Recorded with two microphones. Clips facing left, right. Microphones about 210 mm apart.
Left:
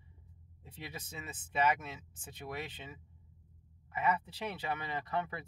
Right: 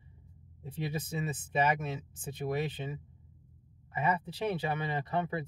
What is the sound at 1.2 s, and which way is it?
Speech, 30° right (ahead or behind).